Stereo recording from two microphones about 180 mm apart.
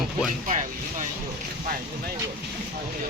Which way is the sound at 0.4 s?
45° right (ahead or behind).